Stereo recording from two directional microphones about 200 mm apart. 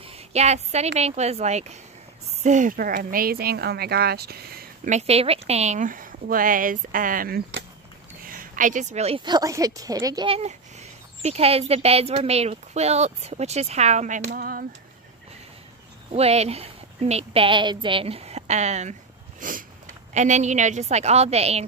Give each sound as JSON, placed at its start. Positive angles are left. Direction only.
{"t": 0.0, "sound": "a woman's voice", "side_deg": -30}
{"t": 4.9, "sound": "a woman's voice", "side_deg": -30}
{"t": 16.1, "sound": "a woman's voice", "side_deg": -30}